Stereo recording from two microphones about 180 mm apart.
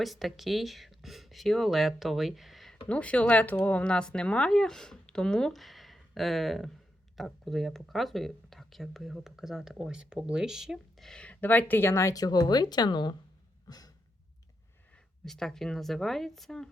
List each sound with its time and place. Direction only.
0.0 s speech: centre (ahead or behind); by 13.1 s 25° left (ahead or behind)
13.7 s sigh: 20° left (ahead or behind)
14.9 s speech: 5° left (ahead or behind)